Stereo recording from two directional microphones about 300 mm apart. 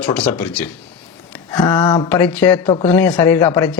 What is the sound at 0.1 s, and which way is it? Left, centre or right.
Speech, centre.